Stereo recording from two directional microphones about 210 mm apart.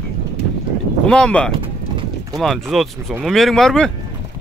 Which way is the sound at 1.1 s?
5° left (ahead or behind).